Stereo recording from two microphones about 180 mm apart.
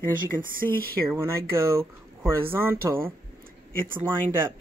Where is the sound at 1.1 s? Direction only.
15° right (ahead or behind).